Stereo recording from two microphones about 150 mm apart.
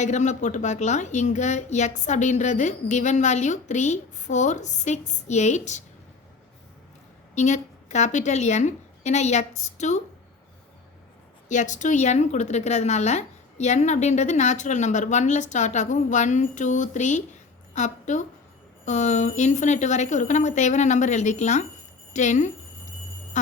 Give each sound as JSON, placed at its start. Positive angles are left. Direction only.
{"t": 0.0, "sound": "speech", "side_deg": 50}
{"t": 7.3, "sound": "speech", "side_deg": 50}
{"t": 11.4, "sound": "a woman's voice", "side_deg": 55}